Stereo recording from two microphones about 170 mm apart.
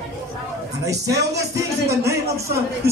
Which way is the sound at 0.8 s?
20° right (ahead or behind).